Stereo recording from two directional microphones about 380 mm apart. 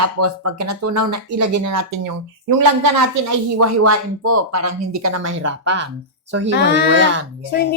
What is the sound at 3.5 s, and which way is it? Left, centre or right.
Speech, right.